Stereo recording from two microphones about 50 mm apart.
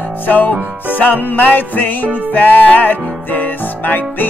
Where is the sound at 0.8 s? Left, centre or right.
Left.